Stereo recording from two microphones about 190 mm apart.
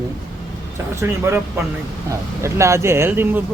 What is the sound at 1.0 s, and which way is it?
Speech, 10° right (ahead or behind).